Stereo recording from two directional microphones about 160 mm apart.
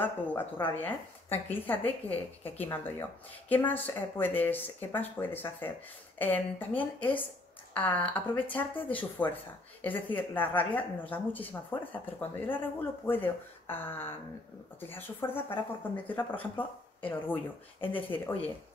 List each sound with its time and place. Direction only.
0.0 s speech: 10° left (ahead or behind)
17.7 s speech: 35° left (ahead or behind)